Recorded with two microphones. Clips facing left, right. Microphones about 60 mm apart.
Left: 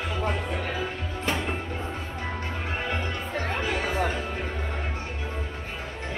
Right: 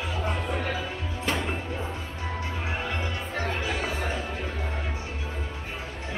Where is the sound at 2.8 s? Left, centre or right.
Left.